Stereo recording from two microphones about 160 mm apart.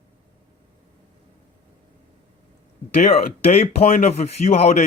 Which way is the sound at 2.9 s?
40° left (ahead or behind).